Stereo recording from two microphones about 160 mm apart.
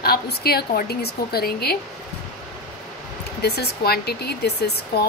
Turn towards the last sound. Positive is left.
turn(degrees=90)